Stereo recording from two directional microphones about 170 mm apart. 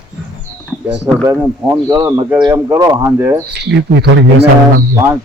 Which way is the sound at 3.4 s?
75° right (ahead or behind).